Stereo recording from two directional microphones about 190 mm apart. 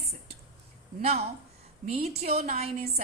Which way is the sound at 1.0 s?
35° right (ahead or behind).